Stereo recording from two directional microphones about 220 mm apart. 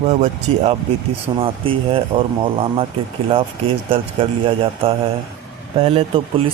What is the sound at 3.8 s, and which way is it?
Speech, 25° right (ahead or behind).